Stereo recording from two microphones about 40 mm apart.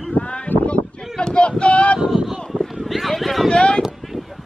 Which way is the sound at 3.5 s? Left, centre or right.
Left.